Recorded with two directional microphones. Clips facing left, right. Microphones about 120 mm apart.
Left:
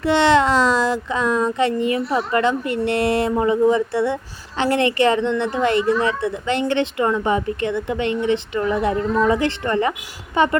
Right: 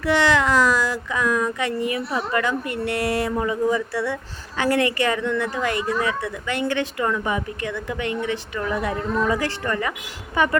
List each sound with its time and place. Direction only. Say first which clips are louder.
0.0 s speech: left 4 dB; 25° left (ahead or behind)